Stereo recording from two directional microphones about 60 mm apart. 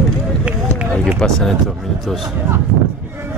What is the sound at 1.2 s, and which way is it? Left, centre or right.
Speech, centre.